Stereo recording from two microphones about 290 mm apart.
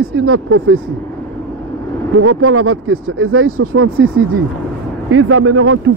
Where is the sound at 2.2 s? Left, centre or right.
Right.